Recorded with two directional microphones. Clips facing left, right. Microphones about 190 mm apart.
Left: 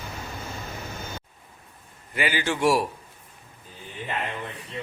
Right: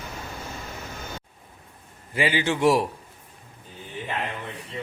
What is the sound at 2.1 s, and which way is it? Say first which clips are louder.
Speech: right 2 dB; 25° right (ahead or behind).